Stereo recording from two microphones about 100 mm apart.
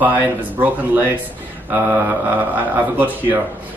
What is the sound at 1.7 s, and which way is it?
Speech, 20° right (ahead or behind).